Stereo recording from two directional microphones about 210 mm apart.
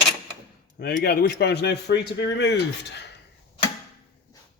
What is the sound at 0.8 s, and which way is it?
Speech, 50° left (ahead or behind).